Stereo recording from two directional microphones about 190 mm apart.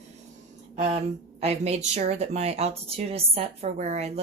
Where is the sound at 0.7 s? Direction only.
35° right (ahead or behind).